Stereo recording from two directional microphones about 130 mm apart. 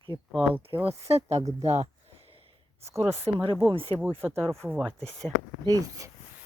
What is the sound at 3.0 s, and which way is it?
Speech, 20° right (ahead or behind).